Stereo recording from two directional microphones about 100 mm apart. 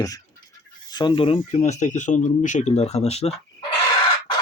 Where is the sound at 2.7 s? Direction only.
90° left.